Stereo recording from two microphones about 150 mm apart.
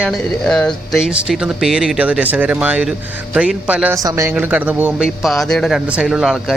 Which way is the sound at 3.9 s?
20° right (ahead or behind).